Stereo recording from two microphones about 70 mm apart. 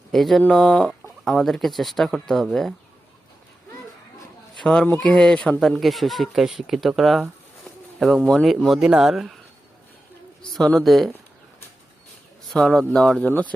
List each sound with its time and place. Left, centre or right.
0.1 s speech: centre
4.5 s speech: centre
5.5 s speech: centre
8.3 s speech: centre
10.8 s speech: centre
12.5 s speech: centre
13.2 s speech: left